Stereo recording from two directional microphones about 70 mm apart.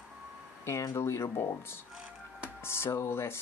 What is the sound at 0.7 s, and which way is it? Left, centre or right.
Speech, left.